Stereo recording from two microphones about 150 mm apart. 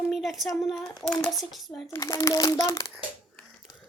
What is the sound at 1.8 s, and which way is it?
A child's voice, 25° left (ahead or behind).